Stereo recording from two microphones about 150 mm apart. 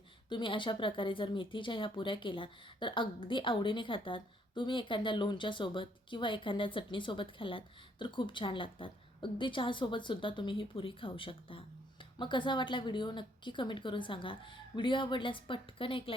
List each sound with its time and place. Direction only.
0.3 s speech: 30° left (ahead or behind)